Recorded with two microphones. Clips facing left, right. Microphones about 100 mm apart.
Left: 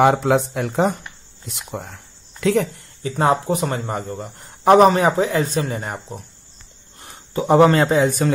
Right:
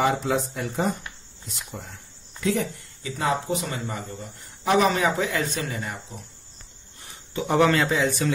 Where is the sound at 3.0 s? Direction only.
45° left (ahead or behind).